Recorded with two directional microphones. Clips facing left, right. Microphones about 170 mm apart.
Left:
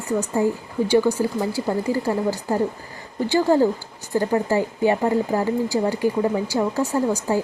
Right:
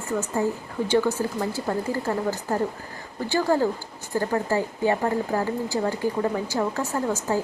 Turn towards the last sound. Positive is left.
turn(degrees=15)  # may be behind; listen again after turning